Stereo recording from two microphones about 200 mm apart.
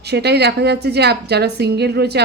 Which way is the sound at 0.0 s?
55° right (ahead or behind).